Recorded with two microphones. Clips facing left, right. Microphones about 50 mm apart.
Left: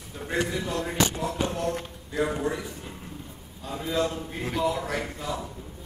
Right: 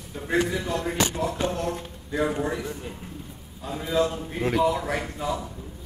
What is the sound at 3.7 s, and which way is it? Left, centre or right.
Speech, centre.